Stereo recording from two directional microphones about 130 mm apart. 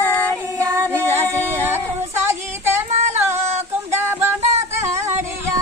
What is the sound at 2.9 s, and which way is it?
Singing, 65° right (ahead or behind).